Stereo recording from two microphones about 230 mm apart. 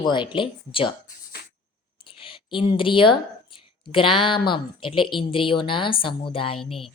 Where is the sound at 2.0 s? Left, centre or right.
Left.